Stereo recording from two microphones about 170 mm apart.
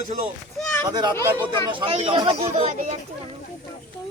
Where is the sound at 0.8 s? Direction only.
25° right (ahead or behind); by 3.0 s 40° right (ahead or behind).